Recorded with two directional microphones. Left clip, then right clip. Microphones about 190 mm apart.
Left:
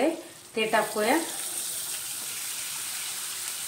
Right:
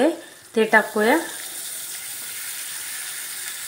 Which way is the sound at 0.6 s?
40° right (ahead or behind).